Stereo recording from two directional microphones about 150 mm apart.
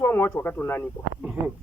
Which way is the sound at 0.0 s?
15° left (ahead or behind).